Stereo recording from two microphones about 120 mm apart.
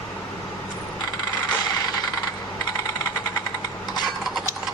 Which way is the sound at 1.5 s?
35° left (ahead or behind).